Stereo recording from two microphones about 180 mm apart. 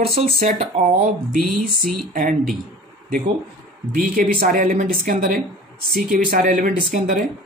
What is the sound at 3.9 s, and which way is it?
A woman's voice, 50° right (ahead or behind).